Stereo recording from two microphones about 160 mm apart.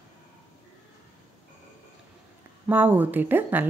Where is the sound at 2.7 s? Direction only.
10° right (ahead or behind).